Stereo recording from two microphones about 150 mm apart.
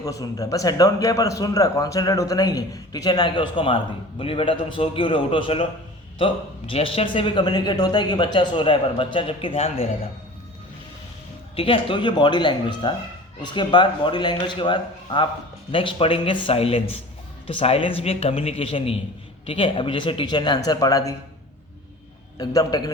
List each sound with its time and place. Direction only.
0.0 s a man's voice: 25° left (ahead or behind); by 9.8 s 40° left (ahead or behind)
11.5 s speech: 40° left (ahead or behind); by 21.2 s 25° left (ahead or behind)
22.4 s a man's voice: 25° left (ahead or behind)